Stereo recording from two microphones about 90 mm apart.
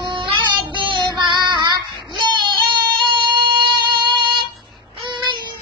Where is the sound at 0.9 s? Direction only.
55° right (ahead or behind).